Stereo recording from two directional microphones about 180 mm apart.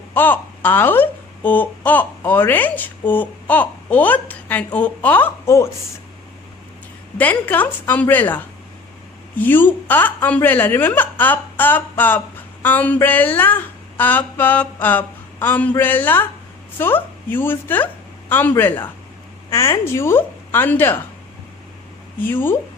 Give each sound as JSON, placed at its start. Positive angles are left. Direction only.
{"t": 0.1, "sound": "a woman's voice", "side_deg": 10}
{"t": 7.2, "sound": "a woman's voice", "side_deg": 10}
{"t": 22.2, "sound": "a woman's voice", "side_deg": 10}